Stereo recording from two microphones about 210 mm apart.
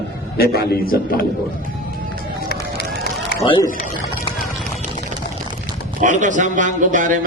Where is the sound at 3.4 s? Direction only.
25° left (ahead or behind).